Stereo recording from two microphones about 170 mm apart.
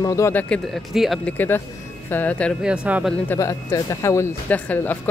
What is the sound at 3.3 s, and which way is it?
Speech, 15° left (ahead or behind).